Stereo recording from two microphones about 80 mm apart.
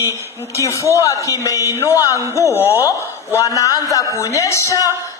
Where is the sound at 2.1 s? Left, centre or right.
Right.